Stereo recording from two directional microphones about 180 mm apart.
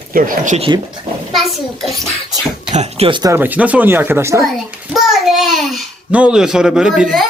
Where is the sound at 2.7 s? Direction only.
35° right (ahead or behind).